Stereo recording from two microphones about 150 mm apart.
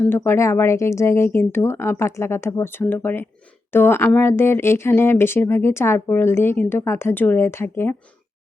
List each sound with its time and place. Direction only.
0.0 s speech: 15° left (ahead or behind)